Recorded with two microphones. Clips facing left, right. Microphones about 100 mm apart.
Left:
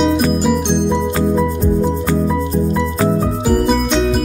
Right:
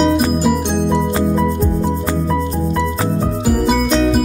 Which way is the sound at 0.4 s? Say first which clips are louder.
Left 1 dB; 5° right (ahead or behind).